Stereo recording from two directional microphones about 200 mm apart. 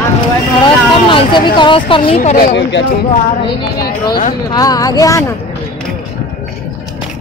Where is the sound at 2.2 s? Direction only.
40° left (ahead or behind).